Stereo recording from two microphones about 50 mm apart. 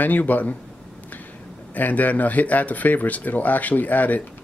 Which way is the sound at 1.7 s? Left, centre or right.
Left.